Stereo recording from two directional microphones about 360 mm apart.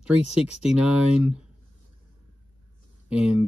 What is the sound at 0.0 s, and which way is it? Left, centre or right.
Speech, centre.